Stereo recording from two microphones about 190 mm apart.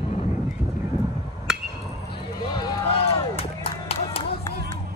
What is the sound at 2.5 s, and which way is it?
Run, 20° left (ahead or behind).